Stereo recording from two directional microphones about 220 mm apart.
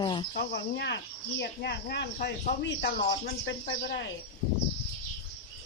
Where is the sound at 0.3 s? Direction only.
50° left (ahead or behind).